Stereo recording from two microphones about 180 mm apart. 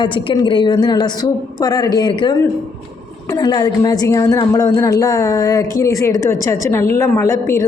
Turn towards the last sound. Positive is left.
turn(degrees=15)  # may be behind; listen again after turning